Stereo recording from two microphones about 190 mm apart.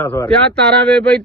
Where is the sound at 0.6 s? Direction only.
60° right (ahead or behind).